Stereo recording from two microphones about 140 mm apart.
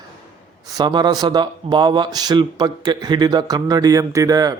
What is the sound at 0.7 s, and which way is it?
Speech, 30° right (ahead or behind).